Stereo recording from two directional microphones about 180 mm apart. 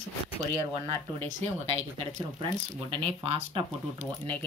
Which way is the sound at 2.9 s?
35° right (ahead or behind).